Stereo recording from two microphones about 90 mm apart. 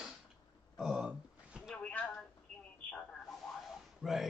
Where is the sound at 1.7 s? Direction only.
15° left (ahead or behind).